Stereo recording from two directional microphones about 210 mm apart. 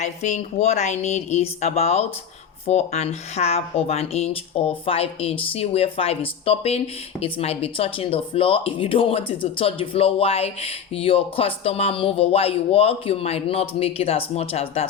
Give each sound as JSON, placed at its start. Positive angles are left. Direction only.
{"t": 0.0, "sound": "a woman's voice", "side_deg": 35}